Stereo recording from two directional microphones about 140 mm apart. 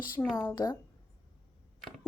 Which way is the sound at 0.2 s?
15° left (ahead or behind).